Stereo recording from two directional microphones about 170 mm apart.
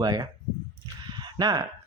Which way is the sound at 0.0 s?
20° right (ahead or behind).